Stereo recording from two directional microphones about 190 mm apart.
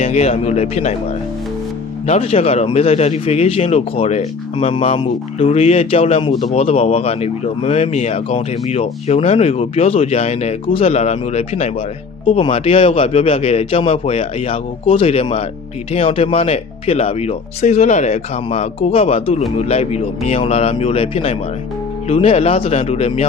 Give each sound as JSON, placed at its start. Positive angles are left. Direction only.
{"t": 0.0, "sound": "speech", "side_deg": 35}
{"t": 2.0, "sound": "speech", "side_deg": 35}